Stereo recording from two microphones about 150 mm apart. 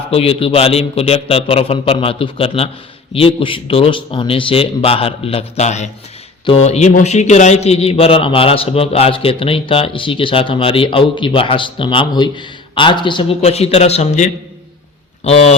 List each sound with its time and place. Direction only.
0.1 s a man's voice: 40° left (ahead or behind)